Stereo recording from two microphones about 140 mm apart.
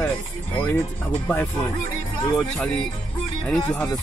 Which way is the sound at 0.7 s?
15° left (ahead or behind).